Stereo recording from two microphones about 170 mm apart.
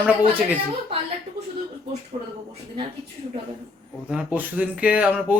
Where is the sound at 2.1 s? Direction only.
30° right (ahead or behind).